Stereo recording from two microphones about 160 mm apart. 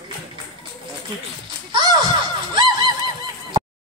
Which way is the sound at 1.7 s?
30° right (ahead or behind).